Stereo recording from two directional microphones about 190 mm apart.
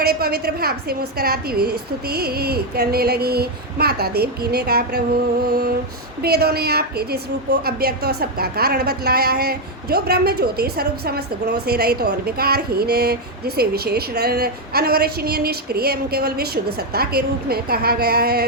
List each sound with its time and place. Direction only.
0.0 s a woman's voice: 55° right (ahead or behind)